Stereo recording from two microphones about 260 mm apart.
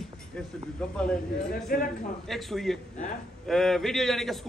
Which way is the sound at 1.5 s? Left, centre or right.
Left.